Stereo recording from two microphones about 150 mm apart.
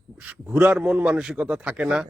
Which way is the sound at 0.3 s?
10° right (ahead or behind).